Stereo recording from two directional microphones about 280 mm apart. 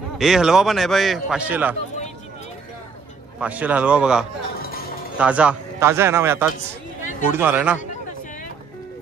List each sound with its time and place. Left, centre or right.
0.2 s a man's voice: centre
3.3 s a man's voice: centre
4.6 s a sound: left
5.2 s a man's voice: centre
7.0 s a sound: left
7.3 s a man's voice: centre